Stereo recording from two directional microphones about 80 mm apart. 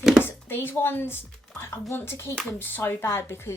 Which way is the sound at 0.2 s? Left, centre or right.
Left.